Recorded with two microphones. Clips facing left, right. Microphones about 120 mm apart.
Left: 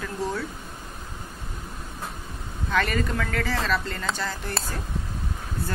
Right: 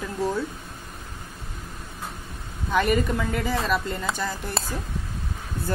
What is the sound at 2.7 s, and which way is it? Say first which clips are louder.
Speech: right 3 dB; 15° right (ahead or behind).